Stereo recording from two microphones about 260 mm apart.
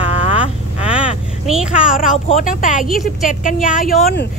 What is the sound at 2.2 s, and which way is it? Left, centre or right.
Speech, left.